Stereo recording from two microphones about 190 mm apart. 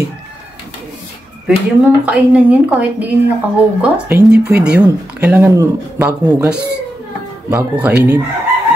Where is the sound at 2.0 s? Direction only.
5° right (ahead or behind).